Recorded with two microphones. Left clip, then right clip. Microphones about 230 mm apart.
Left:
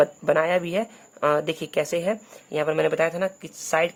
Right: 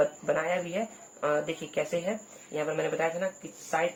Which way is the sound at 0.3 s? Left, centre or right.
Left.